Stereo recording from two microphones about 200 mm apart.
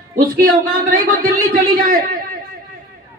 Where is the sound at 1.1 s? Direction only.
45° right (ahead or behind).